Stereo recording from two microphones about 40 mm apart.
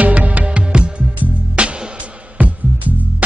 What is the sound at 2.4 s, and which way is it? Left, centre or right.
Music, right.